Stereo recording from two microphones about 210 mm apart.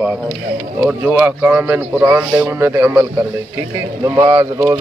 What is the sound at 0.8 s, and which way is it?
A man's voice, 10° right (ahead or behind).